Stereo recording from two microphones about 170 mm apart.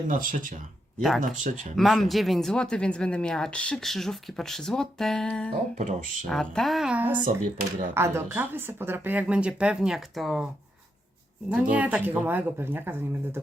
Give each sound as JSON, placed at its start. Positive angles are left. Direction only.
{"t": 0.1, "sound": "speech", "side_deg": -50}
{"t": 1.7, "sound": "speech", "side_deg": 0}
{"t": 5.7, "sound": "speech", "side_deg": -45}
{"t": 6.2, "sound": "speech", "side_deg": 5}
{"t": 7.3, "sound": "speech", "side_deg": -50}
{"t": 7.9, "sound": "speech", "side_deg": -15}